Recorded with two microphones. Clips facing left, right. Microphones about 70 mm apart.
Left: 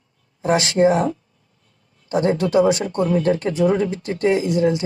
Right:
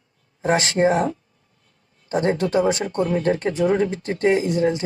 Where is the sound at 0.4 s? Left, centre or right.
Right.